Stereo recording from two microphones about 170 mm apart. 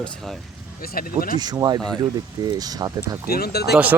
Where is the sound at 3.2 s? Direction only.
65° left (ahead or behind).